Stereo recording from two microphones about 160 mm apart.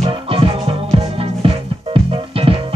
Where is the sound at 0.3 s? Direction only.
35° right (ahead or behind).